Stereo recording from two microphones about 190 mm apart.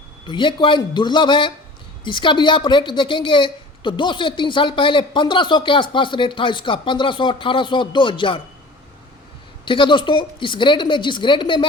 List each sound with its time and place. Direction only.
0.3 s a woman's voice: 25° left (ahead or behind)
9.6 s a woman's voice: 25° left (ahead or behind)